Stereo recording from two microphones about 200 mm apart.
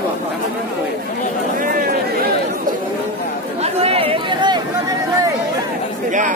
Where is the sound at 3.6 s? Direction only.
30° right (ahead or behind).